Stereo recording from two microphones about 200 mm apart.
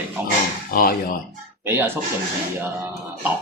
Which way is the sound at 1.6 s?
10° right (ahead or behind).